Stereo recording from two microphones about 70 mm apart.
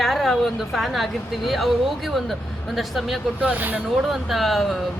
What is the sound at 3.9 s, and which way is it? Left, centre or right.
Speech, centre.